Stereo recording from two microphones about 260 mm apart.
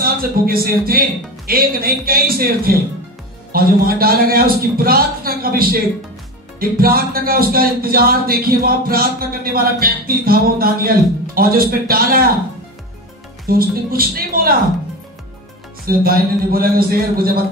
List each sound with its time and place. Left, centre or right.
0.0 s speech: right
13.5 s speech: right
15.8 s speech: right